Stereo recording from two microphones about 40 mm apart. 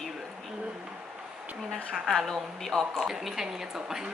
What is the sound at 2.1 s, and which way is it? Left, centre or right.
Speech, centre.